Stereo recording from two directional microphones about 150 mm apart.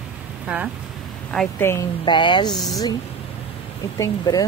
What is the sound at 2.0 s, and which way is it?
Speech, 30° left (ahead or behind).